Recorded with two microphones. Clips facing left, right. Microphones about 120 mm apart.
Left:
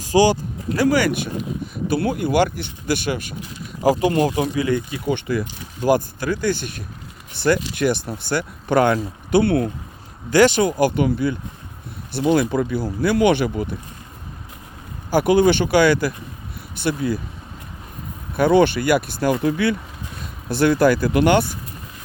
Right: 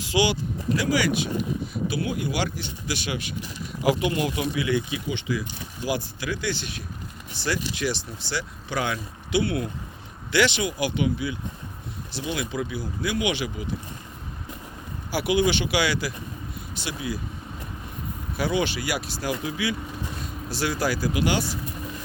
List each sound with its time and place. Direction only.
0.0 s speech: 45° left (ahead or behind)
15.1 s speech: 50° left (ahead or behind)
18.3 s speech: 55° left (ahead or behind)